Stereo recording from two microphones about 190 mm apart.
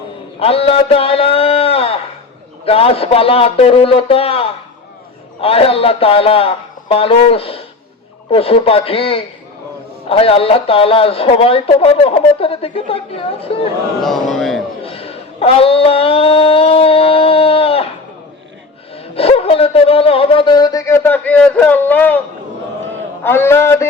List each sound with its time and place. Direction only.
0.3 s a sound: 30° left (ahead or behind)
2.6 s speech: 30° left (ahead or behind)
14.0 s a man's voice: centre (ahead or behind)
14.8 s speech: 30° left (ahead or behind)
19.1 s speech: 30° left (ahead or behind); by 22.2 s 10° left (ahead or behind)
23.2 s a man's voice: 15° left (ahead or behind)